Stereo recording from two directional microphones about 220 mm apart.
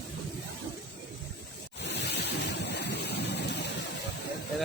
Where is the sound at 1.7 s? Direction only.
50° left (ahead or behind).